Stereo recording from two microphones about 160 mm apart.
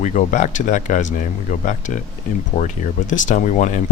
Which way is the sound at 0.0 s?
50° left (ahead or behind).